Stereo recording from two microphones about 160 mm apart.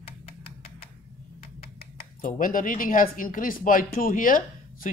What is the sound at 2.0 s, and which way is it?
Speech, 60° left (ahead or behind).